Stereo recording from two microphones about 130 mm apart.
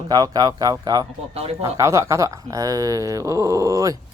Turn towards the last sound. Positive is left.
turn(degrees=-25)  # may be behind; listen again after turning